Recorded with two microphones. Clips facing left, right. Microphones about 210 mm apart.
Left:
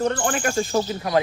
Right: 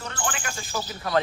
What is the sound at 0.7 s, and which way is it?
Speech, 25° left (ahead or behind).